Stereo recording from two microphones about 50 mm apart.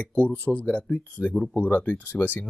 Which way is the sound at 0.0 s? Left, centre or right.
Left.